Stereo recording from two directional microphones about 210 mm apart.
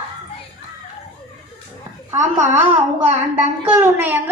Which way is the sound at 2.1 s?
35° right (ahead or behind).